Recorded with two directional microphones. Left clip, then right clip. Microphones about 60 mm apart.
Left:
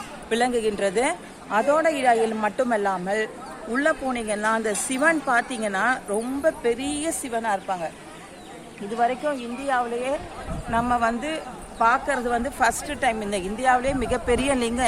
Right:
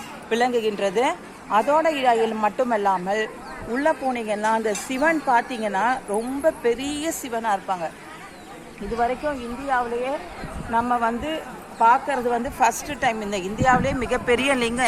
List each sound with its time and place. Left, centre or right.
0.3 s a woman's voice: centre
6.4 s a woman's voice: centre
9.2 s a man's voice: centre
12.6 s a woman's voice: centre